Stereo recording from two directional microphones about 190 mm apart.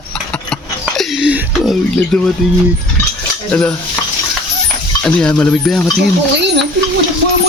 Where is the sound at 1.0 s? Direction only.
5° right (ahead or behind).